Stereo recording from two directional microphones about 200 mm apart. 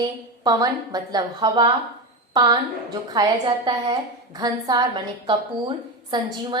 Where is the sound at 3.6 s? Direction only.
20° right (ahead or behind).